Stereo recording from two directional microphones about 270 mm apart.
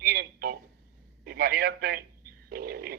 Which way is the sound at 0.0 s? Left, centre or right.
Right.